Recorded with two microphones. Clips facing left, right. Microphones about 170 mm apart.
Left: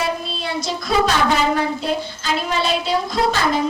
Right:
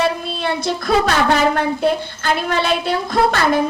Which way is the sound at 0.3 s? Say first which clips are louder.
Right 4 dB; 55° right (ahead or behind).